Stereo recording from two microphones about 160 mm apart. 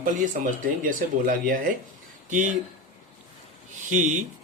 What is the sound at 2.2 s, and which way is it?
Speech, 50° right (ahead or behind).